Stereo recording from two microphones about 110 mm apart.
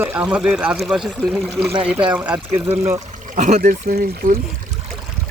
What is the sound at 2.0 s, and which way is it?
Speech, 15° right (ahead or behind).